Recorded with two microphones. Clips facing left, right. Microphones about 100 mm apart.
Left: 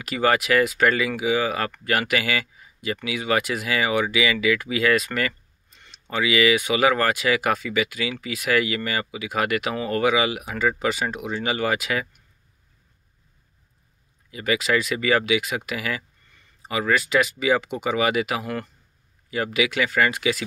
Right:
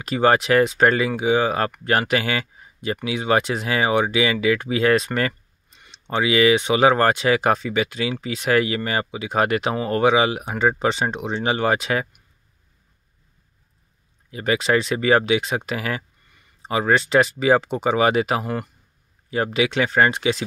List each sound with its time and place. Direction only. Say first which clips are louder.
0.0 s speech: right 4 dB; 30° right (ahead or behind)
14.3 s speech: right 3 dB; 35° right (ahead or behind)
18.4 s speech: right 3 dB; 15° right (ahead or behind)
19.3 s speech: right 3 dB; 35° right (ahead or behind)